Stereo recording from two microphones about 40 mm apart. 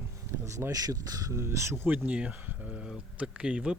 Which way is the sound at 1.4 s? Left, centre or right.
Right.